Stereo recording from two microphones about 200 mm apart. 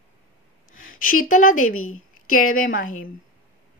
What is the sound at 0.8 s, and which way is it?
A woman's voice, 45° left (ahead or behind).